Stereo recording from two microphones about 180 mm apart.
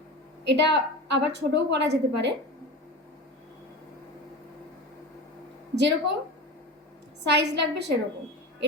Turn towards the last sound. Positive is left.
turn(degrees=-70)  # may be behind; listen again after turning